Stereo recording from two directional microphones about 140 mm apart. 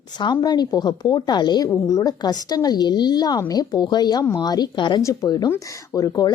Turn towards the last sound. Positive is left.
turn(degrees=25)  # may be behind; listen again after turning